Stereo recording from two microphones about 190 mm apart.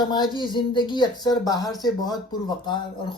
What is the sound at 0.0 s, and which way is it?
Speech, 20° left (ahead or behind).